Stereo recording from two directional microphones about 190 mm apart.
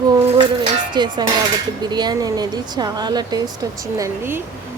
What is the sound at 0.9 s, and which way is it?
Speech, 25° right (ahead or behind).